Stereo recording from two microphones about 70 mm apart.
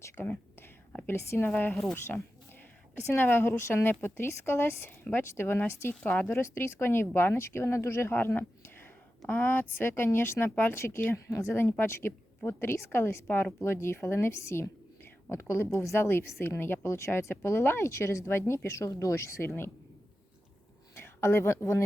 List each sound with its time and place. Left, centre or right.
0.0 s speech: left
2.1 s speech: centre
3.1 s speech: left
6.3 s speech: left
8.1 s a sound: left
9.3 s speech: left
11.5 s speech: left
21.0 s speech: left